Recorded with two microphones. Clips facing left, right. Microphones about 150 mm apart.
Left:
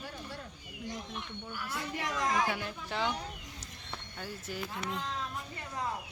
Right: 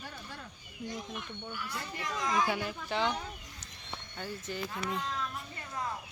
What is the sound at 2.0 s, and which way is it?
Speech, 70° left (ahead or behind).